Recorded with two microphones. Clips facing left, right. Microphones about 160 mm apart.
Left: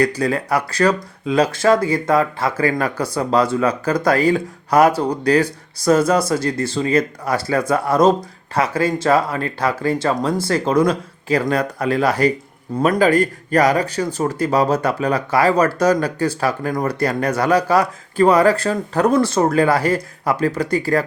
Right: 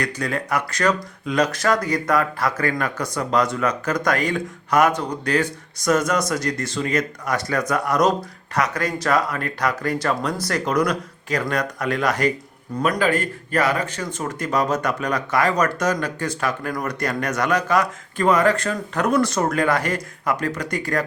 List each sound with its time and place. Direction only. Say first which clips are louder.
0.0 s speech: left 7 dB; 35° left (ahead or behind)